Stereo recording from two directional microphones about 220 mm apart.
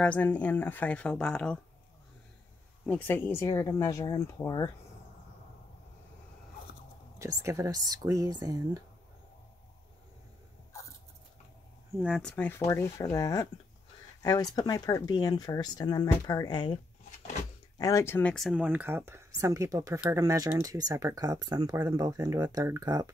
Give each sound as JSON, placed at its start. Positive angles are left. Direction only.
{"t": 0.0, "sound": "speech", "side_deg": 5}
{"t": 2.9, "sound": "speech", "side_deg": 10}
{"t": 7.2, "sound": "speech", "side_deg": -15}
{"t": 11.9, "sound": "speech", "side_deg": -5}
{"t": 12.2, "sound": "speech", "side_deg": 5}
{"t": 17.7, "sound": "speech", "side_deg": 15}